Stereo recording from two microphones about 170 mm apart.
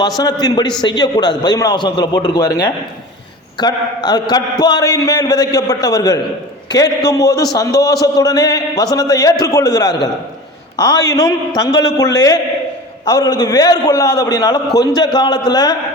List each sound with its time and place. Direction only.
0.2 s a man's voice: 25° left (ahead or behind)